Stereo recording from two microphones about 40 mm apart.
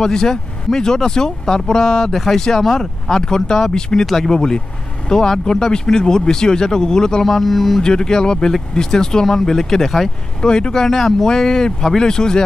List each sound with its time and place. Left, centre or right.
0.0 s speech: centre
4.0 s speech: centre
4.3 s speech: centre
7.3 s speech: centre
7.8 s speech: centre
10.4 s speech: centre